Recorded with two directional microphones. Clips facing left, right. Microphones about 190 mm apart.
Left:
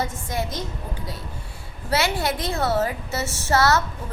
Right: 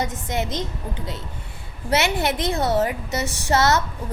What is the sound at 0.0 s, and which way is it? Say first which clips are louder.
Speech: right 2 dB; 20° right (ahead or behind).